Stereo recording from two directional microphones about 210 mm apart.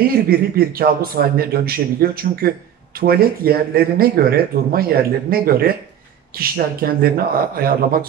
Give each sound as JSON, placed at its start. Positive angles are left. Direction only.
{"t": 0.0, "sound": "speech", "side_deg": -45}